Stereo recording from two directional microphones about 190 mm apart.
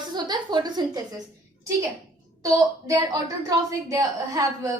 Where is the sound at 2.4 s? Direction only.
15° right (ahead or behind).